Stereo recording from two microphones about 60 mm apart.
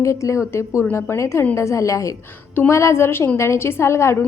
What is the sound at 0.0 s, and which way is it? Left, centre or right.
A woman's voice, left.